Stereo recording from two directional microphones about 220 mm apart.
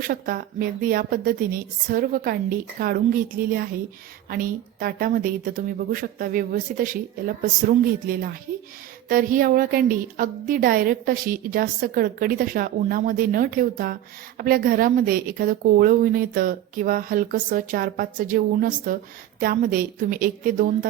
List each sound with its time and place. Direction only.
0.1 s a woman's voice: 40° right (ahead or behind)